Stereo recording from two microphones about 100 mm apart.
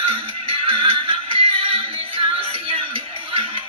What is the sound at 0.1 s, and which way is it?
Music, 65° right (ahead or behind).